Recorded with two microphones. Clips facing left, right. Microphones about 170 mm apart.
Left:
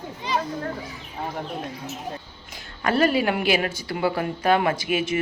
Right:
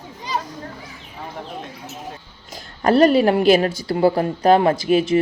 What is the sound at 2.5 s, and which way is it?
A woman's voice, 40° right (ahead or behind).